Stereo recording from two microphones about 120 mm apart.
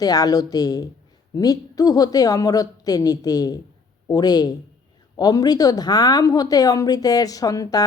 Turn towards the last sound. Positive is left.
turn(degrees=30)  # may be behind; listen again after turning